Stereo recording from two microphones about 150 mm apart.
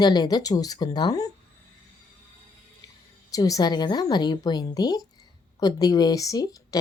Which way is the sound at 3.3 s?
25° left (ahead or behind).